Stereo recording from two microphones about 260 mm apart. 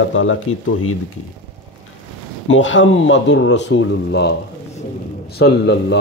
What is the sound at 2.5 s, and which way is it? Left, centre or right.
A man's voice, left.